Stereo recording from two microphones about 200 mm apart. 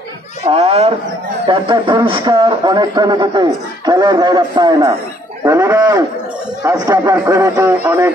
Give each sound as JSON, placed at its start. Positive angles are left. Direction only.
{"t": 0.5, "sound": "a man's voice", "side_deg": -30}